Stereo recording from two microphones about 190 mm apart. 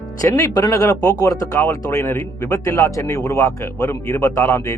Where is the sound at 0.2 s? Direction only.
20° left (ahead or behind).